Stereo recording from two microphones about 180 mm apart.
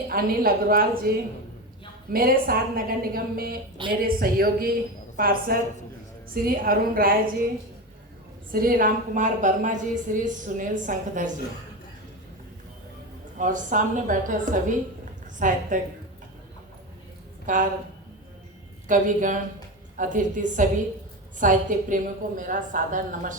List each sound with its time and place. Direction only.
0.1 s a woman's voice: 55° right (ahead or behind)
2.1 s a woman's voice: 55° right (ahead or behind)
8.5 s a woman's voice: 55° right (ahead or behind)
13.4 s a woman's voice: 45° right (ahead or behind)
17.4 s speech: 45° right (ahead or behind)
18.9 s a woman's voice: 45° right (ahead or behind)